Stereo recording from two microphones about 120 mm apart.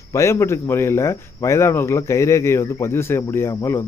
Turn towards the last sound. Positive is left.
turn(degrees=20)  # may be behind; listen again after turning